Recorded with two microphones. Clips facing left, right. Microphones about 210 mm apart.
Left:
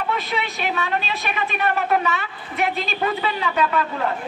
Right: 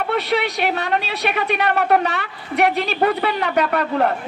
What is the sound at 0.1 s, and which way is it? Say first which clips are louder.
A man's voice: right 6 dB; 70° right (ahead or behind).